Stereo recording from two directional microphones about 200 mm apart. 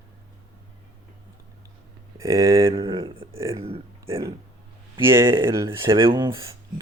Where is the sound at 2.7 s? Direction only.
25° right (ahead or behind).